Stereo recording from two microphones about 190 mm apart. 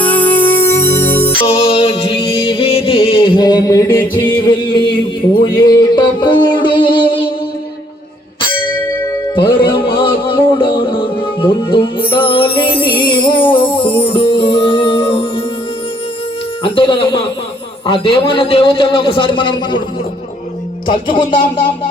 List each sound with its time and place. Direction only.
0.0 s music: 10° left (ahead or behind)
1.5 s music: 30° left (ahead or behind)
5.5 s a man's voice: 20° left (ahead or behind)
6.0 s music: 25° left (ahead or behind)
9.3 s music: 25° left (ahead or behind)
16.6 s a man's voice: 25° left (ahead or behind)
20.8 s a man's voice: 25° left (ahead or behind)